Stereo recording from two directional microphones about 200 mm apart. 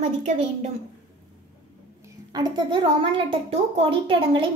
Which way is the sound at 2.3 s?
20° right (ahead or behind).